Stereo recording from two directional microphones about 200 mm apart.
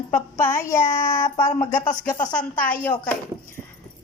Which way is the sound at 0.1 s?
15° left (ahead or behind).